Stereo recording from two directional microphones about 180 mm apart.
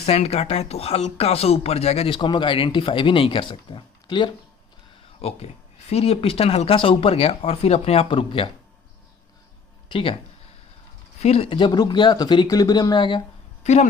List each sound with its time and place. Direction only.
0.0 s speech: 35° left (ahead or behind)
9.9 s speech: 30° left (ahead or behind)
11.2 s speech: 35° left (ahead or behind)
13.6 s speech: 40° left (ahead or behind)